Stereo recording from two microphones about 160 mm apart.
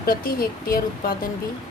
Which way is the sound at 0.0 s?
70° left (ahead or behind).